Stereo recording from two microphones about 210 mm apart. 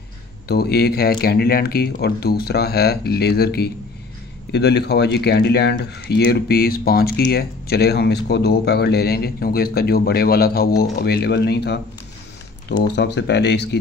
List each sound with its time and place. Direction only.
0.5 s speech: 50° left (ahead or behind)